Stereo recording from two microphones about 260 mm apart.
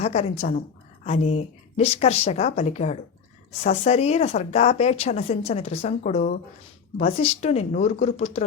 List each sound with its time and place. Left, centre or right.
0.0 s speech: left